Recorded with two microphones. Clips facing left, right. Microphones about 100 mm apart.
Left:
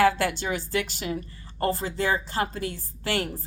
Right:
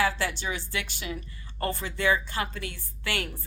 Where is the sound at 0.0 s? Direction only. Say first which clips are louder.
Left 6 dB; 45° left (ahead or behind).